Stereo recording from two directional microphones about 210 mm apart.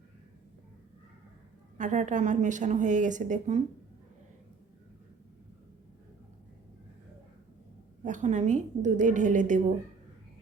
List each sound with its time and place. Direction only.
1.8 s a woman's voice: 35° right (ahead or behind)
8.0 s a woman's voice: 35° right (ahead or behind)